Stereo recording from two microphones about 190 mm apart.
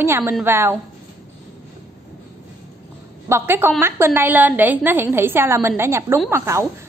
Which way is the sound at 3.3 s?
15° right (ahead or behind).